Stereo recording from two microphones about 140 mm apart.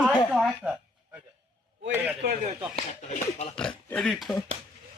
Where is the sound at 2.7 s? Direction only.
50° left (ahead or behind).